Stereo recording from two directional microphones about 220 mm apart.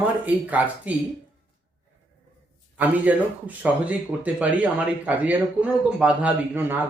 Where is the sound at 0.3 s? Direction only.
5° right (ahead or behind).